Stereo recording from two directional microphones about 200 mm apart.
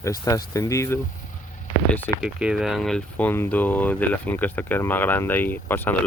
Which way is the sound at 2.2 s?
5° right (ahead or behind).